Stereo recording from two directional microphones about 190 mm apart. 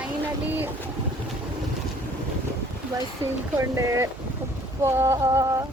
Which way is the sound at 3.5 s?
15° right (ahead or behind).